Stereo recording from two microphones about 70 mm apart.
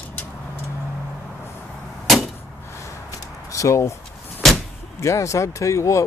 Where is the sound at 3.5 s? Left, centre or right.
Left.